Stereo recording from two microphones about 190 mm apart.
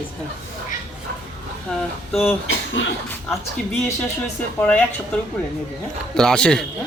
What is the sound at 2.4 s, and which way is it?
Speech, 75° left (ahead or behind).